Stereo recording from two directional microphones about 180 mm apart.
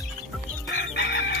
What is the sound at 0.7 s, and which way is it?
Chicken, 80° left.